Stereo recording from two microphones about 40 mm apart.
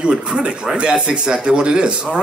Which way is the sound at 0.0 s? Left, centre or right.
Right.